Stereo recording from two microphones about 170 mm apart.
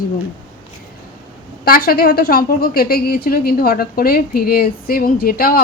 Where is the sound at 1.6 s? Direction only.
60° left (ahead or behind).